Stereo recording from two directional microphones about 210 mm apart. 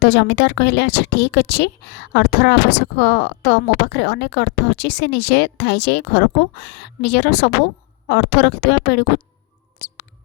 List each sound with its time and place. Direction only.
0.0 s a woman's voice: 55° left (ahead or behind)
9.7 s mouse: 55° left (ahead or behind)